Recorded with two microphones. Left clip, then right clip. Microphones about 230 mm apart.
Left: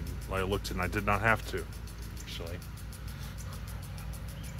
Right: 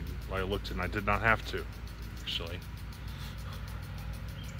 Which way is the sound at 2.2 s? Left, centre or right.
Centre.